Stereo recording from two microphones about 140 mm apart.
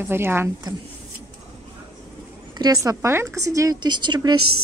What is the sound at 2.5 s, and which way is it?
A woman's voice, 25° right (ahead or behind).